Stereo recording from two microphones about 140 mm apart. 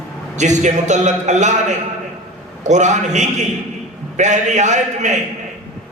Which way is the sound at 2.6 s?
55° right (ahead or behind).